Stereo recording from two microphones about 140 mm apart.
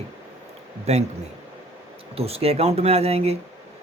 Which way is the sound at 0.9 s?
50° right (ahead or behind).